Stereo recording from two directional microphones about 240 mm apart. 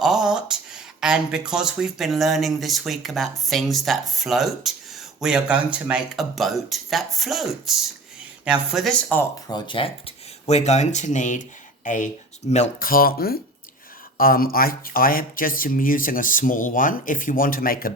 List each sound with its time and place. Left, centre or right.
0.0 s speech: centre
9.5 s speech: centre
12.5 s speech: left